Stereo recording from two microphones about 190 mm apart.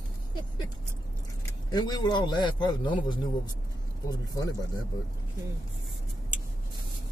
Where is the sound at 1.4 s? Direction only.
20° left (ahead or behind).